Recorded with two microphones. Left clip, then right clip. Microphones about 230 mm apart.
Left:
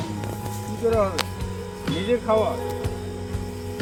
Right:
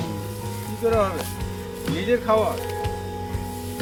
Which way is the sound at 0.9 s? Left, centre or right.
Centre.